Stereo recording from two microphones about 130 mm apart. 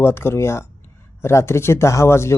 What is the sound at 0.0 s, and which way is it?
Speech, 20° left (ahead or behind).